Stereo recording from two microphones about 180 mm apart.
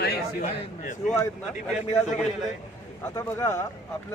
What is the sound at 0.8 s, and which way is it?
Speech, 45° left (ahead or behind).